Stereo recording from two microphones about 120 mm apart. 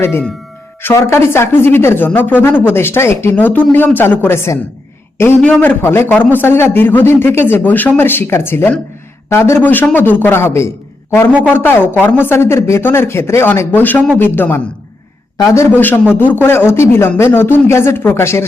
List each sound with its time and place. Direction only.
0.8 s a man's voice: 20° left (ahead or behind)